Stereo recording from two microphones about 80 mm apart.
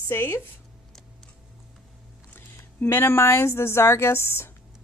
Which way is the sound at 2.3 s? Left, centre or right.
Left.